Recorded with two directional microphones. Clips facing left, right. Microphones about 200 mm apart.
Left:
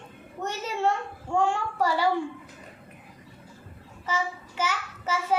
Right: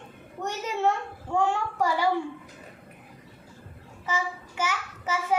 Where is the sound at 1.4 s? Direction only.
15° right (ahead or behind).